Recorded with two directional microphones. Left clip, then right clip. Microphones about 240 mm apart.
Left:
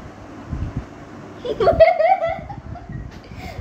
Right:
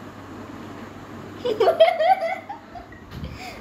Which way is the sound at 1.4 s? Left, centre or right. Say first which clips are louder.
Right 1 dB; centre.